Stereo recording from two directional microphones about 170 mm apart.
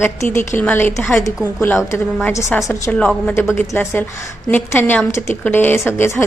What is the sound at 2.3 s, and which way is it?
A woman's voice, 15° left (ahead or behind).